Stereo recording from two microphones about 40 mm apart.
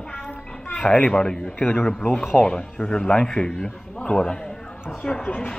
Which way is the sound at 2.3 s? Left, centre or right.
Centre.